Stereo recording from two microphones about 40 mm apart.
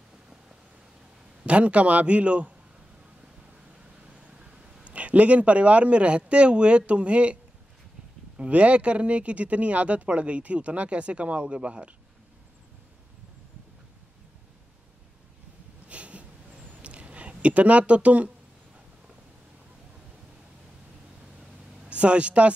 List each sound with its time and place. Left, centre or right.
1.4 s speech: right
4.1 s a sound: right
6.9 s speech: right
8.4 s speech: right
15.9 s a sound: right
21.8 s speech: right